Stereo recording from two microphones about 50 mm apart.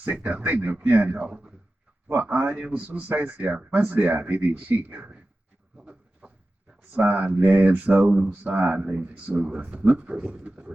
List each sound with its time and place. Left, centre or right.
0.1 s a man's voice: right
2.1 s speech: right
5.7 s a sound: right
6.9 s speech: right